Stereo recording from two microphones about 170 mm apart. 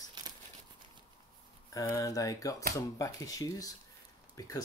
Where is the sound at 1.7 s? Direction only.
20° left (ahead or behind).